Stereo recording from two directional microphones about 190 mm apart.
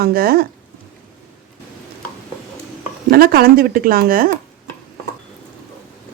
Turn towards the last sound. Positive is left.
turn(degrees=-50)  # may be behind; listen again after turning